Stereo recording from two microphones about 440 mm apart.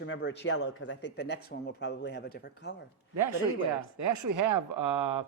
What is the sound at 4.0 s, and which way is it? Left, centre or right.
Speech, right.